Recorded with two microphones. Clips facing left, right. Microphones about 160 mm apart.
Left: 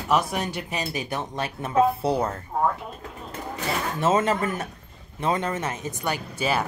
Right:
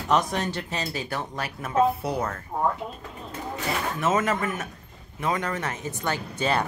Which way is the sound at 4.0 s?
30° left (ahead or behind).